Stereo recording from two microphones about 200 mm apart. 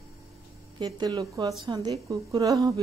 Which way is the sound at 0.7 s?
20° right (ahead or behind).